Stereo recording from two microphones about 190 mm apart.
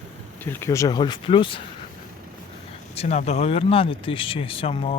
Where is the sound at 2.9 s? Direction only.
35° left (ahead or behind).